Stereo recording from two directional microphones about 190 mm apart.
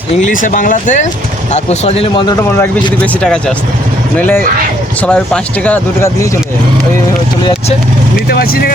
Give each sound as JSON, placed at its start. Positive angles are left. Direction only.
{"t": 0.3, "sound": "speech", "side_deg": 45}
{"t": 2.2, "sound": "speech", "side_deg": 20}
{"t": 3.0, "sound": "speech", "side_deg": 5}
{"t": 8.3, "sound": "speech", "side_deg": 55}